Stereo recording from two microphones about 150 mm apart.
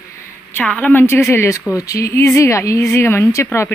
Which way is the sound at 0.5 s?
10° left (ahead or behind).